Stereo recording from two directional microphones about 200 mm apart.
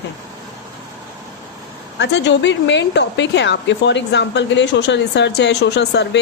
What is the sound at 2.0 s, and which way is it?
Speech, 60° left (ahead or behind).